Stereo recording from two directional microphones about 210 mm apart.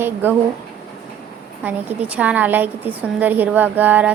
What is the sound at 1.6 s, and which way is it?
A woman's voice, 10° right (ahead or behind).